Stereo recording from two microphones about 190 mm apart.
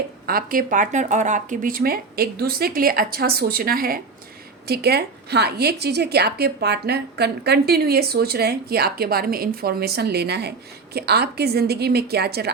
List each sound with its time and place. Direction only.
0.3 s a woman's voice: 50° right (ahead or behind)